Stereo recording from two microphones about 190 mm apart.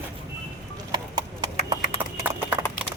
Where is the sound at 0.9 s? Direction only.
25° right (ahead or behind).